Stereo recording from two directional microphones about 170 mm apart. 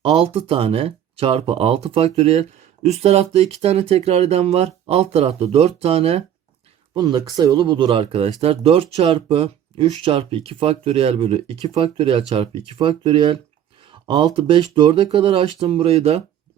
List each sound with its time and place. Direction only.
0.0 s speech: 35° right (ahead or behind)
6.9 s speech: 25° right (ahead or behind)